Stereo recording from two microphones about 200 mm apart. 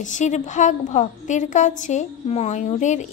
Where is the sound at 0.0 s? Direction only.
35° left (ahead or behind).